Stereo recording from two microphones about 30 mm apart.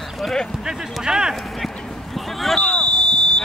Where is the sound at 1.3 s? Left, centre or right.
Centre.